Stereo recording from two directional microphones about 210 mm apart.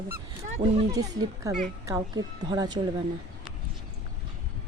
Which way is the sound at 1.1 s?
15° right (ahead or behind).